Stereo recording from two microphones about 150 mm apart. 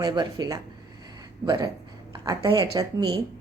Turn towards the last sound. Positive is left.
turn(degrees=-25)  # may be behind; listen again after turning